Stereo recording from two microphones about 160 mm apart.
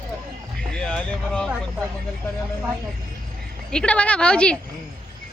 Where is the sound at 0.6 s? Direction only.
5° left (ahead or behind).